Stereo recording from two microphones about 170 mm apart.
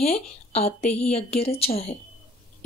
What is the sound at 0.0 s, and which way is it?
A woman's voice, 40° left (ahead or behind).